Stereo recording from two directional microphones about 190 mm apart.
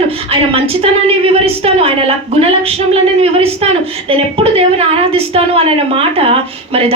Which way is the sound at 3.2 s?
30° right (ahead or behind).